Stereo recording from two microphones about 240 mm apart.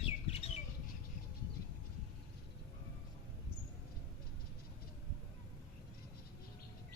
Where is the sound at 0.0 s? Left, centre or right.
Left.